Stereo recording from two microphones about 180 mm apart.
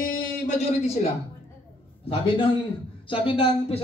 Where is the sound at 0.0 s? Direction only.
50° left (ahead or behind).